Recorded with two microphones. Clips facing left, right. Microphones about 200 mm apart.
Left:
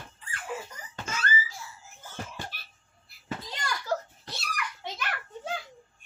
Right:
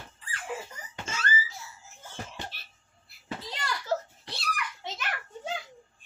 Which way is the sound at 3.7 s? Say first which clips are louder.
Even; 25° right (ahead or behind).